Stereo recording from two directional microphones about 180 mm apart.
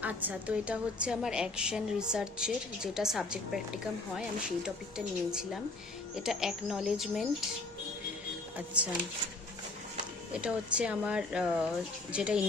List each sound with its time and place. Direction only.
0.0 s a woman's voice: 5° right (ahead or behind)
8.5 s speech: 10° right (ahead or behind)
10.3 s a woman's voice: 5° right (ahead or behind)